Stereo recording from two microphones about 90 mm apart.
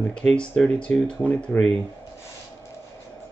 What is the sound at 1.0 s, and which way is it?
Speech, 15° left (ahead or behind).